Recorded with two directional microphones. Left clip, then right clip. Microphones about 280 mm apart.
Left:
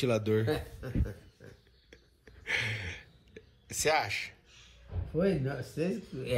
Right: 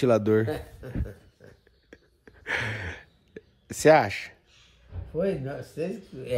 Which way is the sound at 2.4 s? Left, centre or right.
Right.